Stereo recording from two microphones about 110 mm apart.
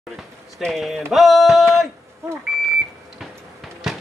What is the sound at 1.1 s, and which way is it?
Music, centre (ahead or behind).